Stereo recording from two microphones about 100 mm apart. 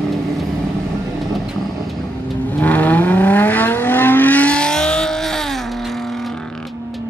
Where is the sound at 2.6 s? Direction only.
15° left (ahead or behind).